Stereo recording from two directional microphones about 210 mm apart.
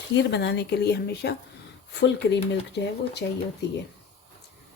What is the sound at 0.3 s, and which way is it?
Speech, 55° left (ahead or behind).